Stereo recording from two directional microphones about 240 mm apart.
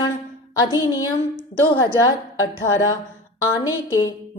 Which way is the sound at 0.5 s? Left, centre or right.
Centre.